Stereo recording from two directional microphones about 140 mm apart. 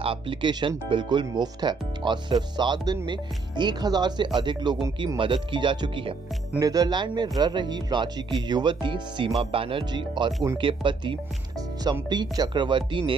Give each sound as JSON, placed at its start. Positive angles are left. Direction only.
{"t": 0.0, "sound": "speech", "side_deg": -40}